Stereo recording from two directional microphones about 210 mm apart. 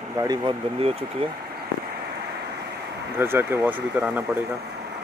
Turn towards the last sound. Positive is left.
turn(degrees=-10)  # may be behind; listen again after turning